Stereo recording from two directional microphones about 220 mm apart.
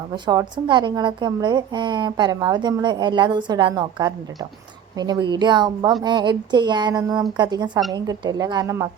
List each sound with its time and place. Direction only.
0.3 s a woman's voice: 20° right (ahead or behind)